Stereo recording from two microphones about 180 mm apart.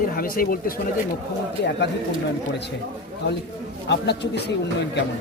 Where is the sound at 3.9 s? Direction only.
70° left (ahead or behind).